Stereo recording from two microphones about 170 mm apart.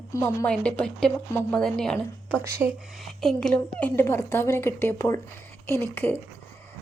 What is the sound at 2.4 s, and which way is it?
Speech, 15° right (ahead or behind).